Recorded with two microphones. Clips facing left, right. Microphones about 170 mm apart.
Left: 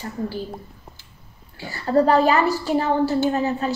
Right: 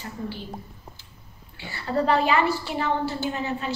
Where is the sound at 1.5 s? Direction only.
40° left (ahead or behind).